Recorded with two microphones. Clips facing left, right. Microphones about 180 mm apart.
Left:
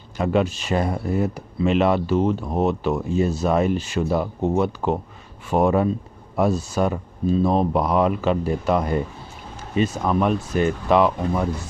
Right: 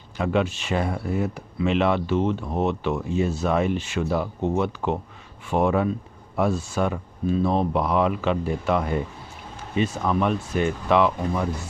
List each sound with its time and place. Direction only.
0.2 s speech: 40° left (ahead or behind)